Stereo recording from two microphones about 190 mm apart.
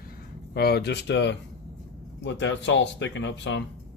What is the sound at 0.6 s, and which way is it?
Speech, 55° left (ahead or behind).